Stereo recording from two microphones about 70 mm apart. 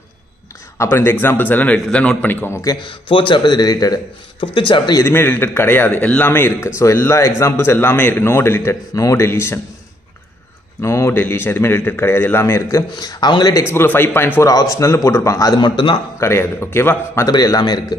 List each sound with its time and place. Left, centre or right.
0.7 s a man's voice: left; by 2.1 s centre
2.2 s a man's voice: left
3.4 s speech: left
5.0 s a man's voice: left
8.9 s a man's voice: left
10.8 s a man's voice: left
12.9 s speech: left
13.7 s a man's voice: left
14.4 s a man's voice: left
16.2 s a man's voice: left
17.3 s a man's voice: left